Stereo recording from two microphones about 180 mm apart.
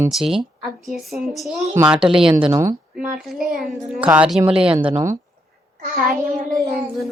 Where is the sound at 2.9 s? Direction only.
5° right (ahead or behind).